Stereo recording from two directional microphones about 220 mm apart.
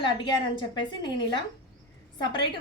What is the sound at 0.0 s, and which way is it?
A woman's voice, 20° left (ahead or behind).